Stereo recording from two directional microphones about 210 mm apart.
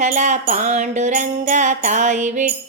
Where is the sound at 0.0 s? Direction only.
35° right (ahead or behind).